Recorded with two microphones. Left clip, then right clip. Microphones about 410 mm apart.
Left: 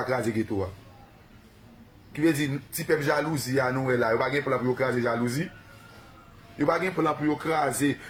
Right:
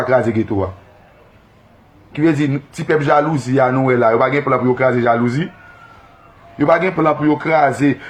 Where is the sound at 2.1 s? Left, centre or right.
Left.